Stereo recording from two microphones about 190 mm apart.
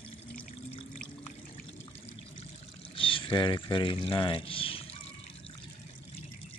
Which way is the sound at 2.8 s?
25° left (ahead or behind).